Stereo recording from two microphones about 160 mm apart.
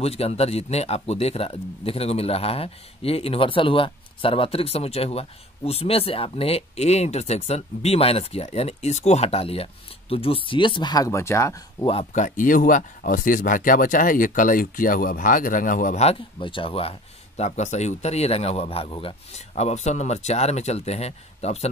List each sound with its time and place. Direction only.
0.0 s a man's voice: 40° left (ahead or behind); by 11.6 s 20° left (ahead or behind)
11.8 s a man's voice: 35° left (ahead or behind)
12.1 s speech: 50° left (ahead or behind); by 16.9 s 35° left (ahead or behind)
17.4 s a man's voice: 45° left (ahead or behind)